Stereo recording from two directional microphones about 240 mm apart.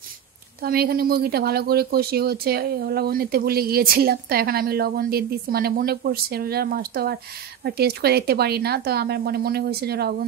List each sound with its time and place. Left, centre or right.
0.6 s a woman's voice: right